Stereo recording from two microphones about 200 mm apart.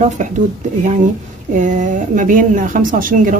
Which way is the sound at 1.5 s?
40° right (ahead or behind).